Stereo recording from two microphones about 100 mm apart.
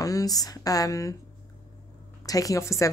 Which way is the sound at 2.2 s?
35° left (ahead or behind).